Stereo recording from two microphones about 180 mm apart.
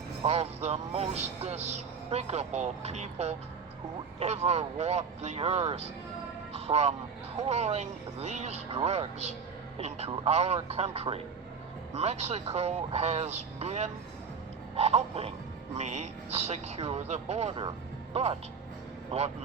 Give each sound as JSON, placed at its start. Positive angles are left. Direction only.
{"t": 0.3, "sound": "a man's voice", "side_deg": -35}